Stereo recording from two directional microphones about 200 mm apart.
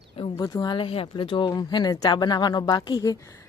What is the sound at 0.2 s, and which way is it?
Speech, 20° left (ahead or behind).